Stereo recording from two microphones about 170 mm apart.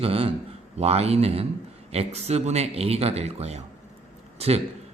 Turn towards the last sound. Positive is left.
turn(degrees=-35)  # may be behind; listen again after turning